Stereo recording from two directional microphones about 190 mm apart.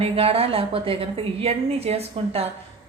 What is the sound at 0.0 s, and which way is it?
A woman's voice, 30° right (ahead or behind).